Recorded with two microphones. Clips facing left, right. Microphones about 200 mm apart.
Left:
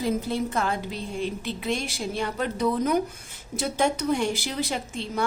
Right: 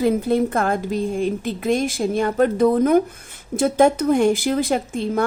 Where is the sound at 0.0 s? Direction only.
55° right (ahead or behind).